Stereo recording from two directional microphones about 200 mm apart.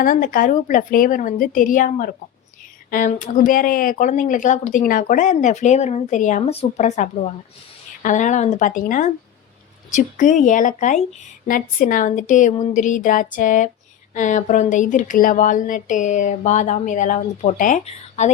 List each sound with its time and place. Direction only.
0.0 s speech: 45° left (ahead or behind)